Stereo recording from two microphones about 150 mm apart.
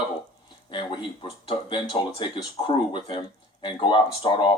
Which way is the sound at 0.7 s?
35° left (ahead or behind).